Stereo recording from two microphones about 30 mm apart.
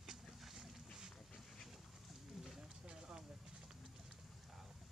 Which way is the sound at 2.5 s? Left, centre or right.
Right.